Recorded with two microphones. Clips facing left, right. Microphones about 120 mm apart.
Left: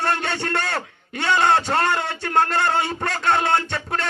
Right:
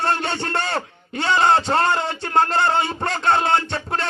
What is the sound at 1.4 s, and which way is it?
A man's voice, 25° right (ahead or behind).